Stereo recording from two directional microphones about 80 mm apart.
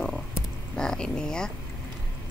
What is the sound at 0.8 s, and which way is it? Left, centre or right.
Speech, centre.